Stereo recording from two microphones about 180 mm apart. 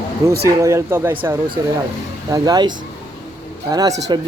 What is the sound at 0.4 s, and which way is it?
Speech, 15° right (ahead or behind).